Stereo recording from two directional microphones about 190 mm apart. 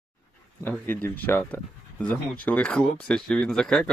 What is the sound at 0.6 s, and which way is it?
Speech, 10° left (ahead or behind).